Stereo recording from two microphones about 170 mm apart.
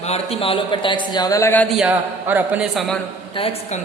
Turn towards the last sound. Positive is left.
turn(degrees=35)  # may be behind; listen again after turning